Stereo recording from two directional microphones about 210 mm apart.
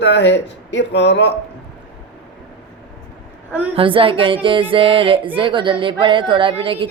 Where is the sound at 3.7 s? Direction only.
25° right (ahead or behind).